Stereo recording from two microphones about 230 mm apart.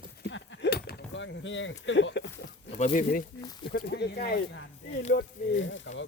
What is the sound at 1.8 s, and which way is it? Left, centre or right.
Speech, left.